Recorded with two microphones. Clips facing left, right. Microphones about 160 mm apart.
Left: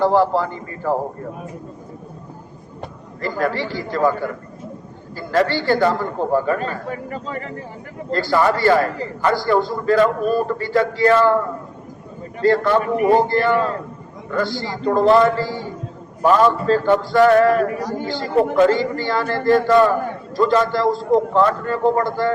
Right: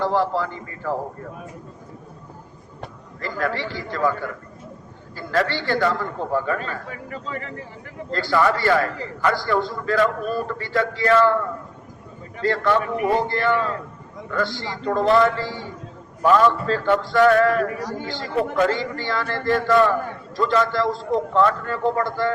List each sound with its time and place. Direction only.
0.0 s a man's voice: 35° left (ahead or behind)
3.2 s a man's voice: 35° left (ahead or behind)
12.4 s a man's voice: 35° left (ahead or behind)
17.2 s a sound: 20° left (ahead or behind)
17.4 s a man's voice: 35° left (ahead or behind)